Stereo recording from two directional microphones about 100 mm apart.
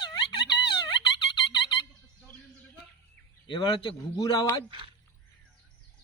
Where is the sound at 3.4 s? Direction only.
50° left (ahead or behind).